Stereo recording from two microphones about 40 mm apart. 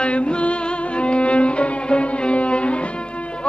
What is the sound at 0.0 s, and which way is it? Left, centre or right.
Music, left.